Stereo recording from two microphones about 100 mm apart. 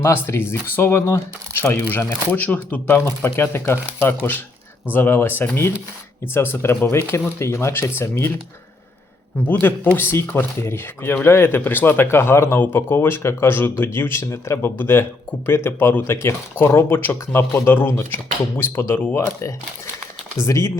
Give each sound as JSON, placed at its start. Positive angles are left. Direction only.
{"t": 0.0, "sound": "speech", "side_deg": 25}
{"t": 3.3, "sound": "speech", "side_deg": 25}
{"t": 9.5, "sound": "speech", "side_deg": 20}